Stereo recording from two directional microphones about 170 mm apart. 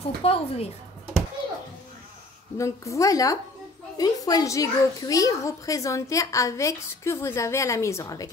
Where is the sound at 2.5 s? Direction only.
20° left (ahead or behind).